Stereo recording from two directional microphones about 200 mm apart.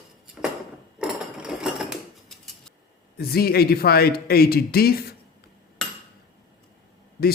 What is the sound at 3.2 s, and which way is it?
A man's voice, 50° left (ahead or behind).